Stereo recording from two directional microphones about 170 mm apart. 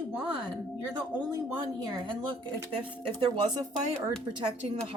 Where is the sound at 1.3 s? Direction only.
20° right (ahead or behind).